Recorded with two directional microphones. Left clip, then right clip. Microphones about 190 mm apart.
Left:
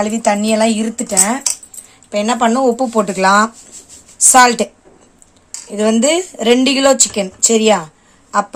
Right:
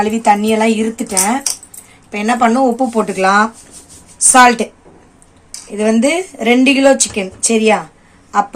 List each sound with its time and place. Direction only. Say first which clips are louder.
0.0 s a woman's voice: right 3 dB; 45° left (ahead or behind)